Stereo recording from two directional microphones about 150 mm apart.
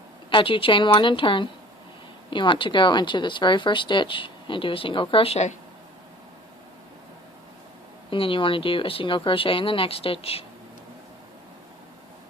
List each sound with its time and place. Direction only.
0.3 s speech: 35° left (ahead or behind)
8.1 s speech: 35° left (ahead or behind)